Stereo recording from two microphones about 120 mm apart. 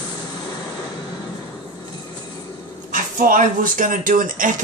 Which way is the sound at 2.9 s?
90° right.